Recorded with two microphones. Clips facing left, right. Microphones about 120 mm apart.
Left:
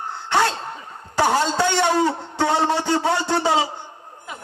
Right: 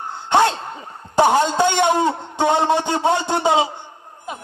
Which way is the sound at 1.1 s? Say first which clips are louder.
Right 4 dB; 20° right (ahead or behind).